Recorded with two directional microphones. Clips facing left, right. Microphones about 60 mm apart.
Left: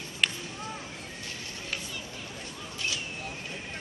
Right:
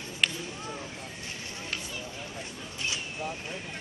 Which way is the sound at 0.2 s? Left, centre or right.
Centre.